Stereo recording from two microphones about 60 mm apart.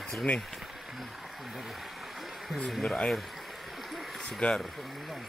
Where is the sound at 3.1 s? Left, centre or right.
Centre.